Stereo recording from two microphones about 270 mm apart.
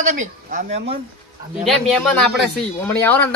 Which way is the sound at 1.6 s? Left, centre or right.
Centre.